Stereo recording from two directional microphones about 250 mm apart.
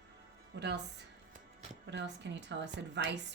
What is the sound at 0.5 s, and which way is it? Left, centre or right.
Speech, right.